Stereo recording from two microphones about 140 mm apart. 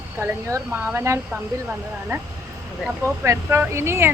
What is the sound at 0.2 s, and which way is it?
A woman's voice, 20° right (ahead or behind).